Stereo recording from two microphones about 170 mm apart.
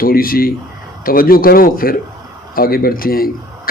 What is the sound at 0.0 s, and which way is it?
Speech, 60° left (ahead or behind).